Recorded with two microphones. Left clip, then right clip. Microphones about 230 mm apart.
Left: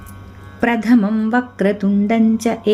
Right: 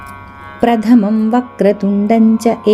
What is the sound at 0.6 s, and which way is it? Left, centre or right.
Music, centre.